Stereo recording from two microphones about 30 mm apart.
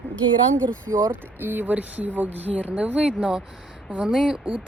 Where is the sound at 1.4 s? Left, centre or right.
Right.